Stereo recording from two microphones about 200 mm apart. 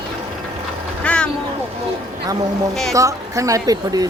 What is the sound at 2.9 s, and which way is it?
Speech, 15° right (ahead or behind).